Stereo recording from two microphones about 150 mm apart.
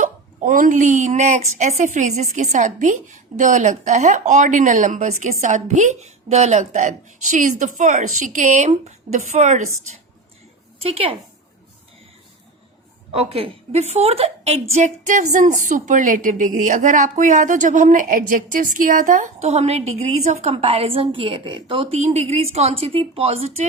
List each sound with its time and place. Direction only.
0.0 s a woman's voice: 65° right (ahead or behind)
10.8 s speech: 40° right (ahead or behind)
13.1 s a woman's voice: 40° right (ahead or behind)